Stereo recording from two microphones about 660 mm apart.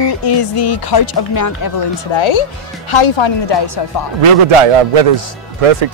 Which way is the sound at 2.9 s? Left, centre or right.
Left.